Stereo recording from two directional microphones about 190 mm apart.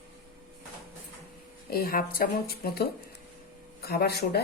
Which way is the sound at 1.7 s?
50° left (ahead or behind).